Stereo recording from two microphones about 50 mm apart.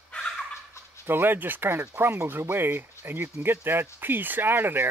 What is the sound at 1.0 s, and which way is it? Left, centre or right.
Speech, right.